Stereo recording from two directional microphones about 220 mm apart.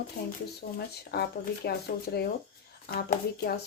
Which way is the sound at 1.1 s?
45° left (ahead or behind).